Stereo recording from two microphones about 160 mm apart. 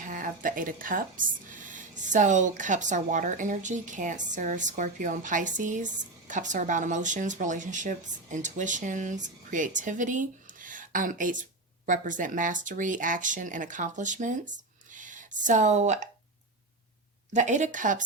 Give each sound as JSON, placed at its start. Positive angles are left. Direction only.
{"t": 0.0, "sound": "speech", "side_deg": -60}
{"t": 17.3, "sound": "speech", "side_deg": -50}